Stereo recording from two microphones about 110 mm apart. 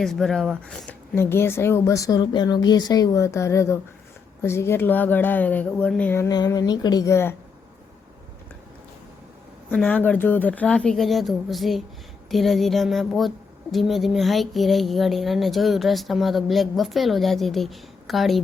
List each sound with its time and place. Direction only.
0.0 s speech: 5° left (ahead or behind)
1.1 s a woman's voice: 20° left (ahead or behind)
6.2 s speech: 35° left (ahead or behind)
9.6 s speech: 15° left (ahead or behind)